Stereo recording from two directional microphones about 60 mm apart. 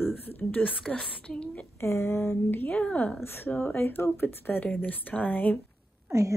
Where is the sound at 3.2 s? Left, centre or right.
Left.